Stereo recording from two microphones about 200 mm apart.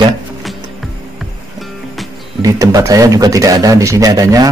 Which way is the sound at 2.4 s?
15° right (ahead or behind).